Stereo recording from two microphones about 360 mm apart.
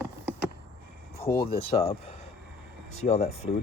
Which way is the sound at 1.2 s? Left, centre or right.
Centre.